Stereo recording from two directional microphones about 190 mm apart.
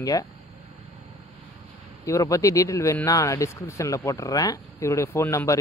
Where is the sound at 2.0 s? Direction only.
15° left (ahead or behind).